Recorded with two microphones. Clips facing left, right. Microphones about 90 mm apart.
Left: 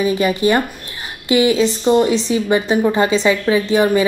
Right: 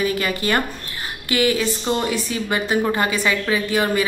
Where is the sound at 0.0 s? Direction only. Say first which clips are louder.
Left 6 dB; 20° left (ahead or behind).